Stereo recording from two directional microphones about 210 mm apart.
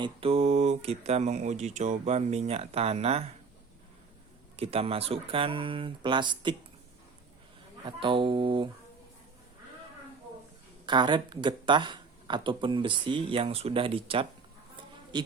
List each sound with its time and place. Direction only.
0.0 s speech: 25° right (ahead or behind)
4.5 s speech: 30° right (ahead or behind)
7.9 s speech: 25° right (ahead or behind)
10.8 s a man's voice: 20° right (ahead or behind)